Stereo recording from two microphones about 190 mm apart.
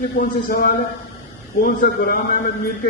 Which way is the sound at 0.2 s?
50° left (ahead or behind).